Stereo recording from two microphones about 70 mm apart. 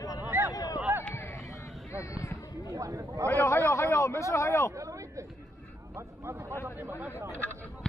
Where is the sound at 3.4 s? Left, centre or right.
Left.